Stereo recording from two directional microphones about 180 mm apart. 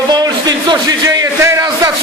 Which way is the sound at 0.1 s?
20° right (ahead or behind).